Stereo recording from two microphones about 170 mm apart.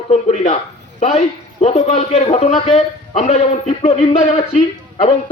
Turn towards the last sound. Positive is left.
turn(degrees=40)  # may be behind; listen again after turning